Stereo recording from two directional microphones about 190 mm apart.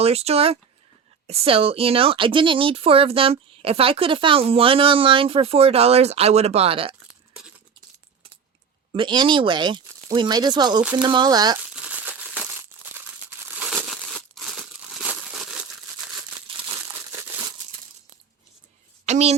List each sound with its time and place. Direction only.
0.0 s speech: 35° right (ahead or behind)
8.9 s speech: 25° right (ahead or behind)
11.7 s crumpling: 5° right (ahead or behind)
13.6 s crumpling: centre (ahead or behind)
19.0 s a woman's voice: 35° right (ahead or behind)